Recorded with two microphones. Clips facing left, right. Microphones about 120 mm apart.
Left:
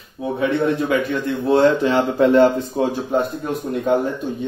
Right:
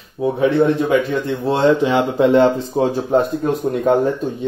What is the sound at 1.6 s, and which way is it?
Speech, 15° right (ahead or behind).